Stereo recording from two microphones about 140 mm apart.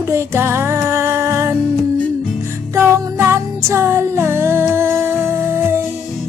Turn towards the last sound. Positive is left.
turn(degrees=-15)  # may be behind; listen again after turning